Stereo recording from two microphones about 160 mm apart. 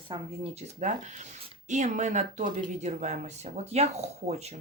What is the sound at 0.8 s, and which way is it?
Speech, 50° right (ahead or behind).